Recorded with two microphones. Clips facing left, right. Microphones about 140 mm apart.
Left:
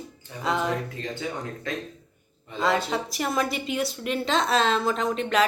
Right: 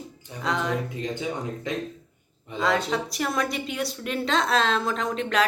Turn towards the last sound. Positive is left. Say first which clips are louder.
# left 2 dB
turn(degrees=0)  # may be behind; listen again after turning